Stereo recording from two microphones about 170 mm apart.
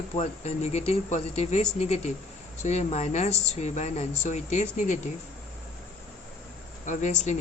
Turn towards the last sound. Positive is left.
turn(degrees=45)  # may be behind; listen again after turning